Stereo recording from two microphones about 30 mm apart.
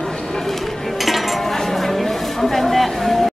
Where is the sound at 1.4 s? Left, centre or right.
Centre.